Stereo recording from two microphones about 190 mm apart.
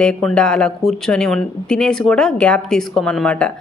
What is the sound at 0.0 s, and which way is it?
Speech, 5° left (ahead or behind).